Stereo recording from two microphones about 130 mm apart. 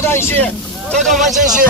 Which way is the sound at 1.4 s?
75° right (ahead or behind).